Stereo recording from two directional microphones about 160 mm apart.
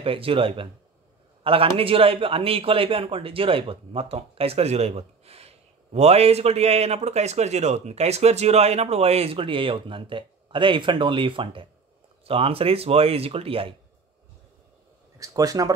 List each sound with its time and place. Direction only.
0.0 s a man's voice: 35° right (ahead or behind)
15.1 s speech: 20° right (ahead or behind)